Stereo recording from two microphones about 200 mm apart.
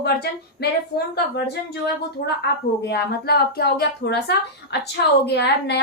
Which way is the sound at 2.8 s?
55° left (ahead or behind).